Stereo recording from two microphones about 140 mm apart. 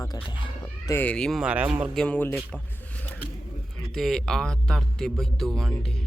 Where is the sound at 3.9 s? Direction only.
5° left (ahead or behind).